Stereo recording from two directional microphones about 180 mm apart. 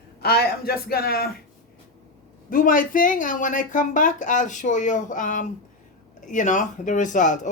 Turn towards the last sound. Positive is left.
turn(degrees=45)  # may be behind; listen again after turning